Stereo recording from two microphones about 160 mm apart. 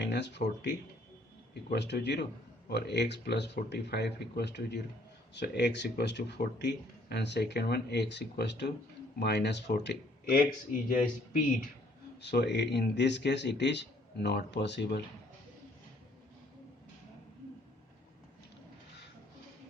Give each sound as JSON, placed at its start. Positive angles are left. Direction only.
{"t": 0.0, "sound": "speech", "side_deg": 90}
{"t": 12.2, "sound": "speech", "side_deg": 90}